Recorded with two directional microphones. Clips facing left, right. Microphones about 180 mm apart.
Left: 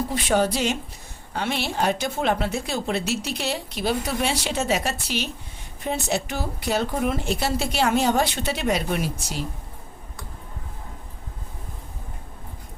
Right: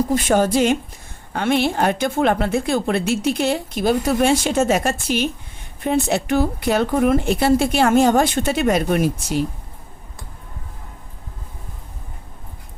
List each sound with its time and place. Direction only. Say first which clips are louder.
0.1 s a woman's voice: right 5 dB; 45° right (ahead or behind)